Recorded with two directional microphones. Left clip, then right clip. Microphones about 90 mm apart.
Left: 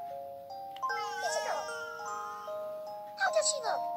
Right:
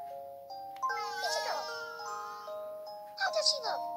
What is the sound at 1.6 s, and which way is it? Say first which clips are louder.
Music: left 1 dB; 25° right (ahead or behind).